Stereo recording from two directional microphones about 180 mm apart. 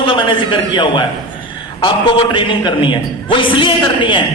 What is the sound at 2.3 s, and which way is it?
A man's voice, 25° left (ahead or behind).